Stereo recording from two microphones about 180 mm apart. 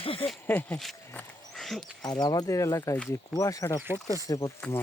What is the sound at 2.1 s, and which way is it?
Speech, 25° left (ahead or behind).